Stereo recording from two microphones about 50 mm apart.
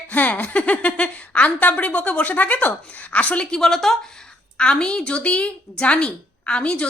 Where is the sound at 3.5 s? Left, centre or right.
Centre.